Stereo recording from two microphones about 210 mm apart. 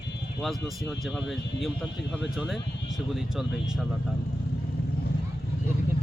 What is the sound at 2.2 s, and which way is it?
Speech, centre (ahead or behind).